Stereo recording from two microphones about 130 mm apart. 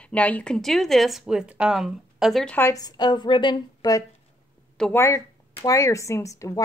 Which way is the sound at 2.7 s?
30° left (ahead or behind).